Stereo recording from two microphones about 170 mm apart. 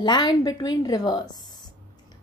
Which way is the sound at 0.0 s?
25° left (ahead or behind).